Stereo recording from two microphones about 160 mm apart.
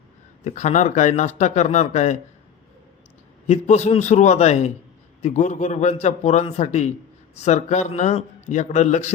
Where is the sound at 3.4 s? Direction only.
45° left (ahead or behind).